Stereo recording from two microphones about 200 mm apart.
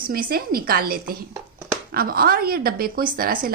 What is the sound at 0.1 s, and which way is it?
A woman's voice, 50° right (ahead or behind).